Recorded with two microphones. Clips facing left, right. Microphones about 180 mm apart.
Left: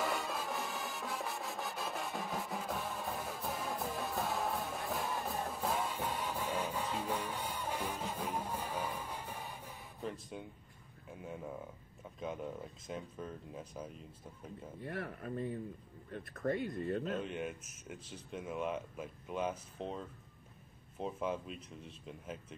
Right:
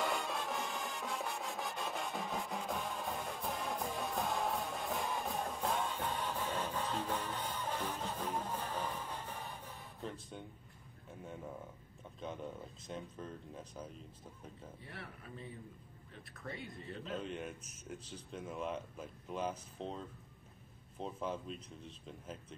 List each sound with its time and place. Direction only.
0.0 s music: centre (ahead or behind)
12.2 s speech: 5° left (ahead or behind)
14.8 s speech: 50° left (ahead or behind)
17.2 s speech: 5° left (ahead or behind)
21.0 s speech: 5° left (ahead or behind)